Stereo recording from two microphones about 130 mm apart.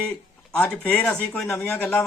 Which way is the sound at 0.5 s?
10° left (ahead or behind).